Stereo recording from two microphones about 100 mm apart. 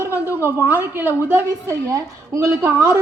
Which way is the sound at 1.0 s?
30° left (ahead or behind).